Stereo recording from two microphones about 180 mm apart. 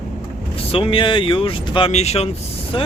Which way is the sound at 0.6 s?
30° left (ahead or behind).